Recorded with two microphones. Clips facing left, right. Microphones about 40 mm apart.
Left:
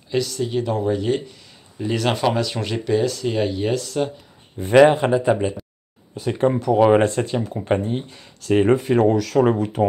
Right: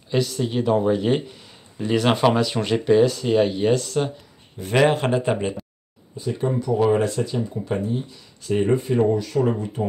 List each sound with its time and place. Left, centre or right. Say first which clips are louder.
0.1 s speech: left 1 dB; centre
4.6 s speech: left 4 dB; left
5.0 s speech: left 3 dB; centre
6.1 s speech: left 4 dB; left
7.0 s speech: left 3 dB; left
8.5 s speech: left 3 dB; left